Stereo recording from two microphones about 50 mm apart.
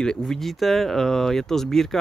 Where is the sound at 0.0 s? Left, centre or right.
Centre.